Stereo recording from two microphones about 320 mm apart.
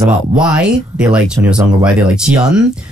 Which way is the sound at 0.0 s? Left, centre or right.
Centre.